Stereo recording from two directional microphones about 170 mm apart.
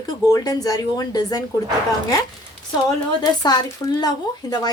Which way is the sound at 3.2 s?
25° left (ahead or behind).